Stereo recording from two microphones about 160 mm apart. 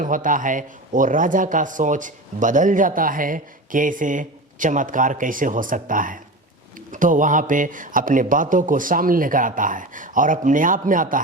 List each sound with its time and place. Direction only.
0.0 s a man's voice: 55° right (ahead or behind)